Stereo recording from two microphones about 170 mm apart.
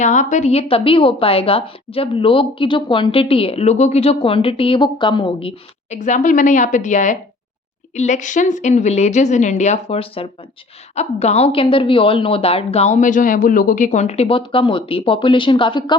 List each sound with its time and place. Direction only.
0.0 s a woman's voice: 45° left (ahead or behind)
6.0 s a woman's voice: 45° left (ahead or behind); by 16.0 s 30° left (ahead or behind)